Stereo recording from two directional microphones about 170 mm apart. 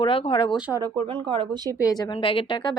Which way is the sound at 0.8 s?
25° right (ahead or behind).